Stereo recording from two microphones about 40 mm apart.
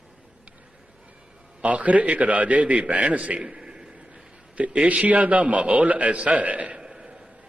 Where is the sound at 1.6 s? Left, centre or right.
Right.